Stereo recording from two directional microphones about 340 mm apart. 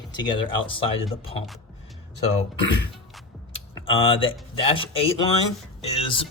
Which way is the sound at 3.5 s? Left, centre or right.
Centre.